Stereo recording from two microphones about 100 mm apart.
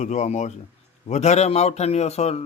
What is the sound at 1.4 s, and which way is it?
Speech, 90° left.